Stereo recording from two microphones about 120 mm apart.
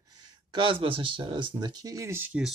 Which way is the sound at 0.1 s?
40° right (ahead or behind).